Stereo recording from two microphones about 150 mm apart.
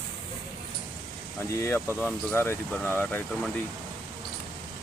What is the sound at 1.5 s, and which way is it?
Speech, 15° left (ahead or behind).